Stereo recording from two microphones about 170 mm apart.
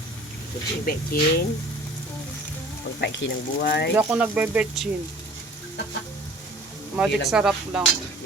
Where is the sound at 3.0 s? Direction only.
85° left.